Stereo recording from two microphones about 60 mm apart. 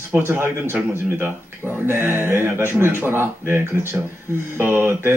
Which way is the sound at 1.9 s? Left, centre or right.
Right.